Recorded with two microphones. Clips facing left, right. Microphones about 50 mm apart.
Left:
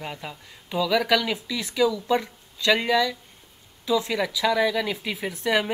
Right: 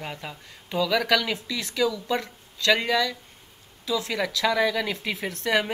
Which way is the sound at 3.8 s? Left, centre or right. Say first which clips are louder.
Left 4 dB; left.